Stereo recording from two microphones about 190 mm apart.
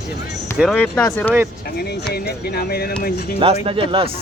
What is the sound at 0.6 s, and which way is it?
Speech, 5° left (ahead or behind).